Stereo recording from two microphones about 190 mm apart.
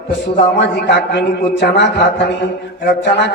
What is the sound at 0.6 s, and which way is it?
A man's voice, 65° left (ahead or behind).